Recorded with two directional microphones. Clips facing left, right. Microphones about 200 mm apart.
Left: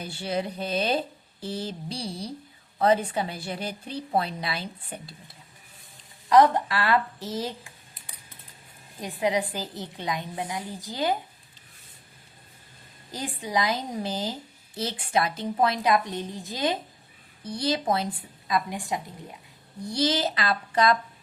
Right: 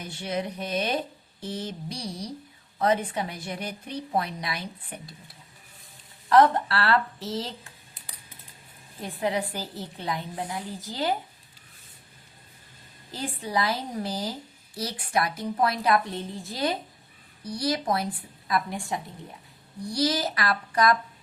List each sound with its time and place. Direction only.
0.0 s a woman's voice: 30° left (ahead or behind)
6.2 s a woman's voice: 15° left (ahead or behind)
9.0 s a woman's voice: 15° left (ahead or behind)
13.1 s a woman's voice: 15° left (ahead or behind)